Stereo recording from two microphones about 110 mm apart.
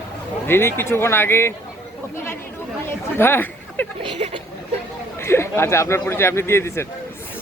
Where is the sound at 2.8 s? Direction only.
20° left (ahead or behind).